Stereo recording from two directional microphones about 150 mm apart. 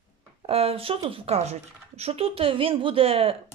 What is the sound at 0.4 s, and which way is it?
A woman's voice, 40° right (ahead or behind).